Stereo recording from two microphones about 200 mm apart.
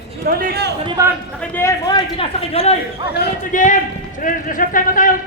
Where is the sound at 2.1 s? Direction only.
30° left (ahead or behind).